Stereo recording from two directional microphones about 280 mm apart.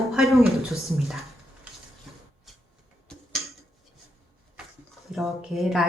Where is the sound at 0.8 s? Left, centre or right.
Centre.